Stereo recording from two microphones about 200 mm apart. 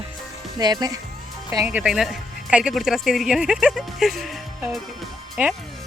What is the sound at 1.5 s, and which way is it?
Speech, 10° right (ahead or behind).